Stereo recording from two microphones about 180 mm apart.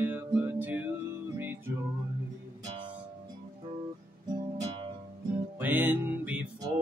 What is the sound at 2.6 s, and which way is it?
Music, 30° right (ahead or behind).